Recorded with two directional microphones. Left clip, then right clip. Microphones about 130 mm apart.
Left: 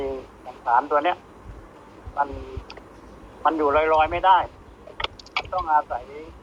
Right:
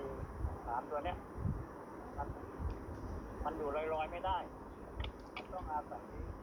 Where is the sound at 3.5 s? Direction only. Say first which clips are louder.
Left 19 dB; 35° left (ahead or behind).